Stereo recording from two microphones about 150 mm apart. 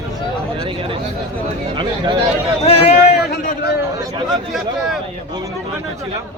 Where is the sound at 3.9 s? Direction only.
25° right (ahead or behind).